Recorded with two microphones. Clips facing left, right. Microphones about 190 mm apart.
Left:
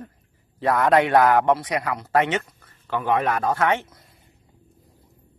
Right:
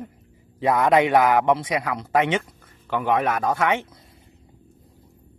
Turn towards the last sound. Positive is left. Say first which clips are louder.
# even
turn(degrees=-10)  # may be behind; listen again after turning